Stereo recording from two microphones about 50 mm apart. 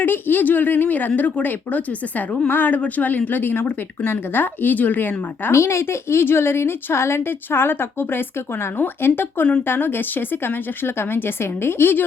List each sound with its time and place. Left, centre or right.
0.0 s speech: left
5.5 s a woman's voice: left
7.2 s a woman's voice: left